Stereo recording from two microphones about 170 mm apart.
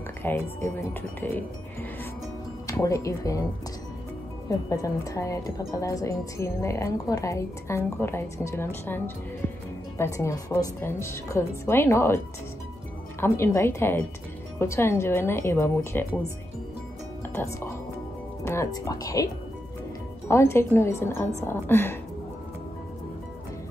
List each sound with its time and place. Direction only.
0.2 s a woman's voice: 10° left (ahead or behind)
4.5 s a woman's voice: 20° left (ahead or behind)
13.2 s a woman's voice: 15° left (ahead or behind)
17.4 s a woman's voice: 15° left (ahead or behind)